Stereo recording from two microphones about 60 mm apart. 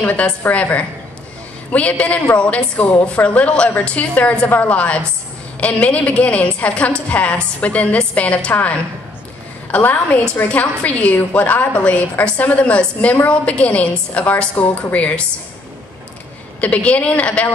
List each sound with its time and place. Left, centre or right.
0.0 s a woman's voice: left
16.6 s a woman's voice: left